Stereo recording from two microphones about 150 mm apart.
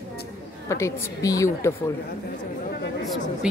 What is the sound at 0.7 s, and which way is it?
A woman's voice, 20° left (ahead or behind).